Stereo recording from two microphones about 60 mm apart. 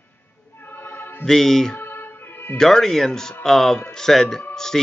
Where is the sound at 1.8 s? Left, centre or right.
Left.